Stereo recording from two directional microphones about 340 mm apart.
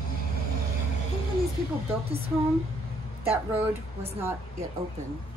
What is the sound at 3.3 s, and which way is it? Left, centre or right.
Speech, centre.